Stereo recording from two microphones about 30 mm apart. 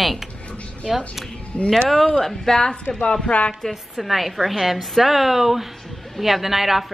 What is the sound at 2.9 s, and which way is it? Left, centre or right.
Speech, left.